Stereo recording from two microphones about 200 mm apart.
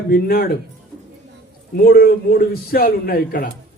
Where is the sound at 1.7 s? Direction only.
45° left (ahead or behind).